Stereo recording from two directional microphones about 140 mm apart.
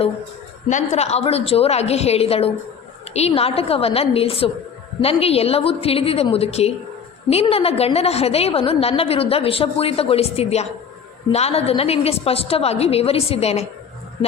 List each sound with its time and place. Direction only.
0.7 s a woman's voice: 60° left (ahead or behind)